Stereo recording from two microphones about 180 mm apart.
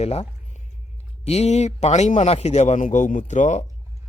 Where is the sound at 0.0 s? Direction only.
35° left (ahead or behind).